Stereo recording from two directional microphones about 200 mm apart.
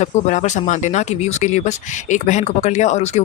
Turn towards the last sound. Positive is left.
turn(degrees=35)  # may be behind; listen again after turning